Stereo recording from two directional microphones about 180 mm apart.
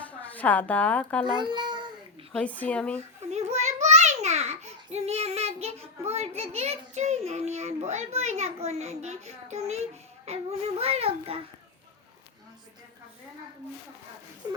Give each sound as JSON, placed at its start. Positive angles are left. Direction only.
{"t": 0.2, "sound": "a woman's voice", "side_deg": 10}
{"t": 1.2, "sound": "a child's voice", "side_deg": -25}
{"t": 2.3, "sound": "speech", "side_deg": 10}
{"t": 3.3, "sound": "a sound", "side_deg": -40}
{"t": 10.2, "sound": "child singing", "side_deg": -35}
{"t": 14.4, "sound": "a sound", "side_deg": -20}